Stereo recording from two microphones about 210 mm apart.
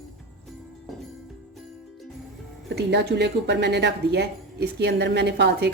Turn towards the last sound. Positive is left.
turn(degrees=-55)  # may be behind; listen again after turning